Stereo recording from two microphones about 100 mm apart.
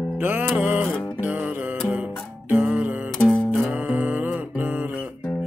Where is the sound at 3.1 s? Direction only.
5° left (ahead or behind).